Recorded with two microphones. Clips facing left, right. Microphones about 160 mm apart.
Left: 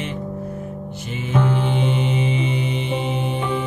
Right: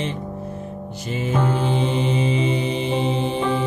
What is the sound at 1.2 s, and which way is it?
Music, 35° right (ahead or behind).